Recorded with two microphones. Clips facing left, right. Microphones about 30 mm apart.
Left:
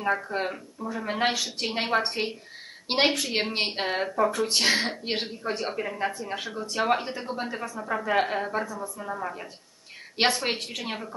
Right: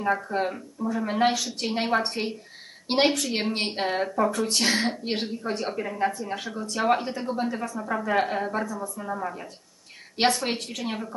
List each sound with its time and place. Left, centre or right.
0.0 s a woman's voice: centre